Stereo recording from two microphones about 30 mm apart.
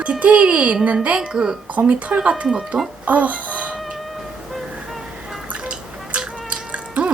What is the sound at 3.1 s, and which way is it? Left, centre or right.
Speech, right.